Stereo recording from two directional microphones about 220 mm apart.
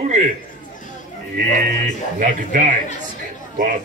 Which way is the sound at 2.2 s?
35° right (ahead or behind).